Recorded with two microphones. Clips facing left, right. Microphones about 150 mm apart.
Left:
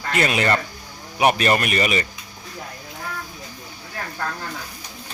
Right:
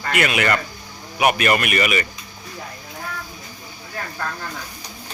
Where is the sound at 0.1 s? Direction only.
30° left (ahead or behind).